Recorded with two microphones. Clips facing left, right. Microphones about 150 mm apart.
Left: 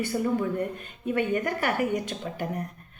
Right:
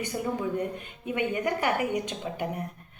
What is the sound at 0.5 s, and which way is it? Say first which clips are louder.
A woman's voice: left 1 dB; 15° right (ahead or behind).